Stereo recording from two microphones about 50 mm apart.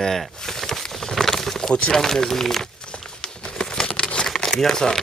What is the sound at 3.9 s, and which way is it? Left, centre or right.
Crumpling, left.